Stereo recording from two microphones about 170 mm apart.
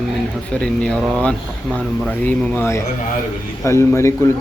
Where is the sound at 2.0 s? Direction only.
10° left (ahead or behind).